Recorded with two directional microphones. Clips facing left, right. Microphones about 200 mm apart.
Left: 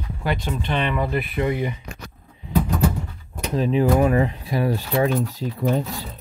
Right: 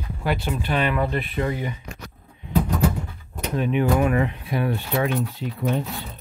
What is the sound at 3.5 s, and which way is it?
Speech, 30° left (ahead or behind).